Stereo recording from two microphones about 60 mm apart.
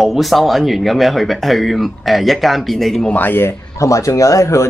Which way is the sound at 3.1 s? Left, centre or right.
Left.